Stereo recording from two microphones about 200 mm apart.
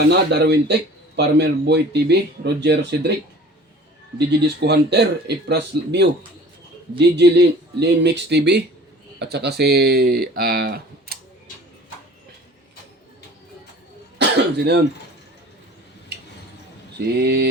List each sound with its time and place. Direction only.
0.1 s speech: 55° right (ahead or behind)
4.3 s speech: 55° right (ahead or behind)
14.2 s speech: 55° right (ahead or behind)
17.2 s speech: 55° right (ahead or behind)